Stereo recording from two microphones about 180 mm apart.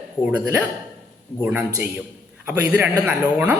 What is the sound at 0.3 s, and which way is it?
Speech, 10° right (ahead or behind).